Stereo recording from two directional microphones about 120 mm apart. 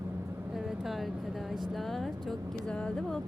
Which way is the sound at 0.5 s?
Centre (ahead or behind).